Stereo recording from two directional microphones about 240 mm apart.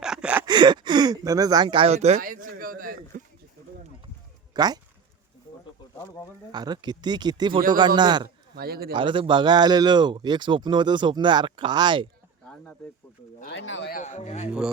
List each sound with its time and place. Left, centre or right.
0.0 s a sound: centre
0.4 s speech: centre; by 3.2 s right
4.5 s speech: centre
6.5 s speech: centre
8.5 s speech: right
8.9 s speech: right
13.4 s speech: left
14.0 s speech: left